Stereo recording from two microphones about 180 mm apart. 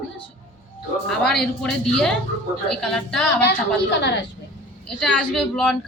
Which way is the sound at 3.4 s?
70° left (ahead or behind).